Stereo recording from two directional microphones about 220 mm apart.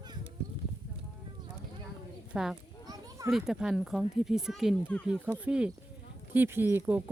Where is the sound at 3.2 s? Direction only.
Centre (ahead or behind).